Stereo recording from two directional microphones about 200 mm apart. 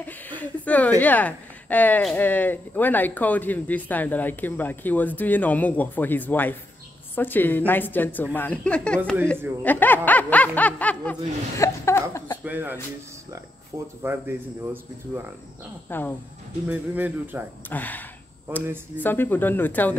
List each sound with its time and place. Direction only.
0.0 s a woman's voice: 10° left (ahead or behind)
12.4 s speech: 10° right (ahead or behind)
15.9 s speech: 10° left (ahead or behind)
16.6 s speech: 10° right (ahead or behind)
17.6 s speech: 10° left (ahead or behind)